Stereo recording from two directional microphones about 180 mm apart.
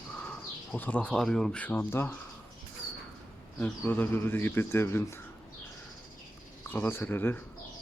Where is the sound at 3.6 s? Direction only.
10° left (ahead or behind).